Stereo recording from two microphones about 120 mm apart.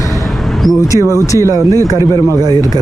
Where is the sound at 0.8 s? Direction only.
25° left (ahead or behind).